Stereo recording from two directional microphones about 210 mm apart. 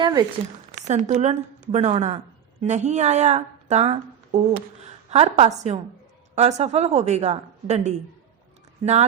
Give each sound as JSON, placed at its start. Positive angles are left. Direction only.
{"t": 0.0, "sound": "speech", "side_deg": -20}
{"t": 0.9, "sound": "a woman's voice", "side_deg": -35}